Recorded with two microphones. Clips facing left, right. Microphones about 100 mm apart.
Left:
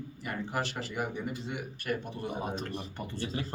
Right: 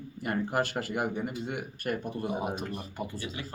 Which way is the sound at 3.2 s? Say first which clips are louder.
Left 3 dB; 35° left (ahead or behind).